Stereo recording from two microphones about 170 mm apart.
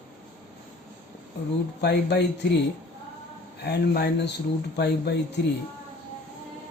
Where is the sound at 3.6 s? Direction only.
70° left (ahead or behind).